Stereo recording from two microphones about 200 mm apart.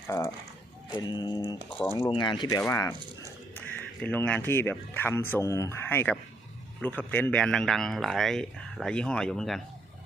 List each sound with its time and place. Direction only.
0.1 s a man's voice: 15° left (ahead or behind)